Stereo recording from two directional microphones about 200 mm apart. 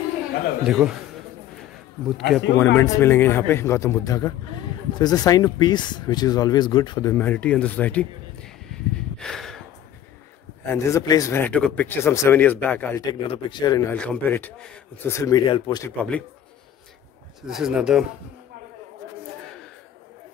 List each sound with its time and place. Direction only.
0.7 s speech: 5° right (ahead or behind)
2.1 s speech: centre (ahead or behind)
2.5 s speech: 10° left (ahead or behind)
8.9 s a sound: 5° left (ahead or behind)
10.6 s speech: 10° left (ahead or behind)
13.9 s speech: 5° left (ahead or behind); by 15.8 s 25° left (ahead or behind)
15.8 s speech: 5° left (ahead or behind)
17.5 s speech: centre (ahead or behind)